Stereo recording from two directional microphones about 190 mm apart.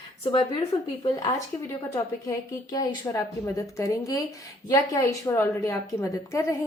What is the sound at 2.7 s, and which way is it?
A woman's voice, 15° left (ahead or behind).